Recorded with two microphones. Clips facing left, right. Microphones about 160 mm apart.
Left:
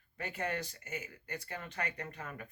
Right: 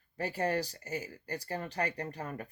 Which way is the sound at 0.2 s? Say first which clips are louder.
Right 6 dB; 35° right (ahead or behind).